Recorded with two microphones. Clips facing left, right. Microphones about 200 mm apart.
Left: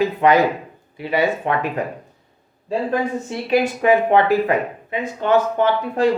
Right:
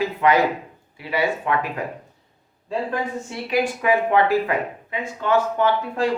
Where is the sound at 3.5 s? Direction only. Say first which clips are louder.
Left 4 dB; 25° left (ahead or behind).